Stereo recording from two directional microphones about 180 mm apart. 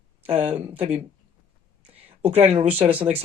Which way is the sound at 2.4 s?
35° right (ahead or behind).